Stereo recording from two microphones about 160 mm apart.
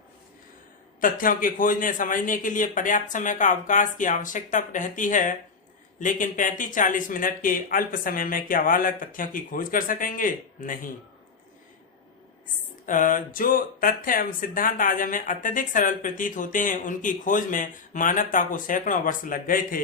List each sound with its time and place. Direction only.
1.2 s speech: 60° left (ahead or behind)
12.8 s speech: 55° left (ahead or behind)